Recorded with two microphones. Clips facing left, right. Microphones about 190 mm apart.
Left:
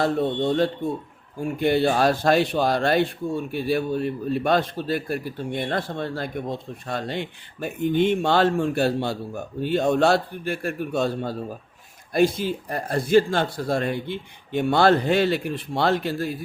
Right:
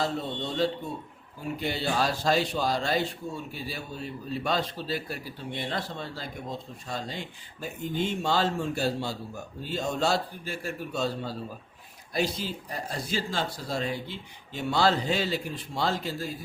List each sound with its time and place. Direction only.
0.0 s speech: 55° left (ahead or behind)